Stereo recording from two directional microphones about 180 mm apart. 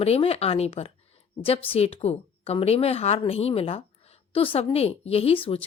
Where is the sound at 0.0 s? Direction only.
35° left (ahead or behind).